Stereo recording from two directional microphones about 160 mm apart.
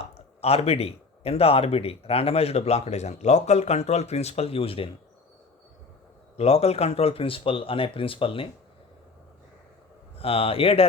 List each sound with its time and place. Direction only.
0.1 s speech: 40° left (ahead or behind)
6.3 s speech: 40° left (ahead or behind)
10.2 s speech: 35° left (ahead or behind)